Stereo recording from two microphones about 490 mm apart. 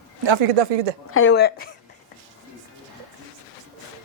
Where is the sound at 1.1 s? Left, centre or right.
Left.